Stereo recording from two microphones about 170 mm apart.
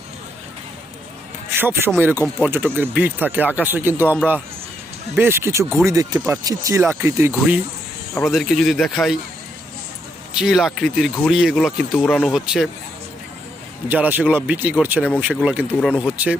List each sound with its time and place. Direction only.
1.5 s a man's voice: 15° right (ahead or behind)
5.1 s speech: 15° right (ahead or behind)
8.1 s speech: centre (ahead or behind)
10.3 s speech: 5° right (ahead or behind)
12.0 s speech: 10° left (ahead or behind)
13.8 s speech: 10° right (ahead or behind)